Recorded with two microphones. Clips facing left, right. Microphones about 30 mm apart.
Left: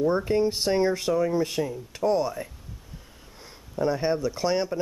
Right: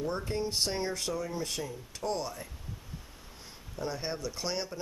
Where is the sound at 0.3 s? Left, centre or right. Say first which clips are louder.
Left 9 dB; centre.